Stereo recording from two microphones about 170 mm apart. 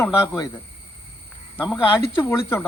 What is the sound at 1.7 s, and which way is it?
Speech, 15° left (ahead or behind).